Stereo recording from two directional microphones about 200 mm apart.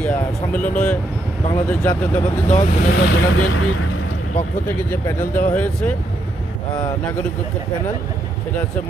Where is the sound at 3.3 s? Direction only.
90° left.